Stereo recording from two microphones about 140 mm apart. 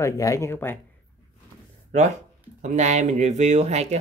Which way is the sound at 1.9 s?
55° right (ahead or behind).